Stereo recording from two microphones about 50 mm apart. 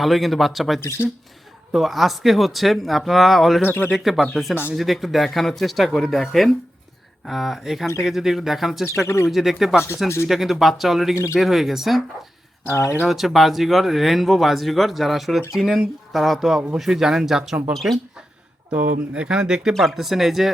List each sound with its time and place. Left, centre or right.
0.0 s speech: centre
0.8 s speech: left
1.7 s speech: centre
3.6 s speech: left
3.9 s speech: centre
8.9 s speech: left
9.3 s speech: centre
12.6 s speech: left
13.1 s speech: centre
17.7 s speech: centre
19.1 s speech: centre
19.7 s speech: centre